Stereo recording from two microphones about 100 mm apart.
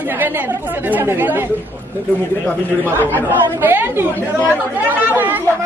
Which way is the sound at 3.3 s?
20° right (ahead or behind).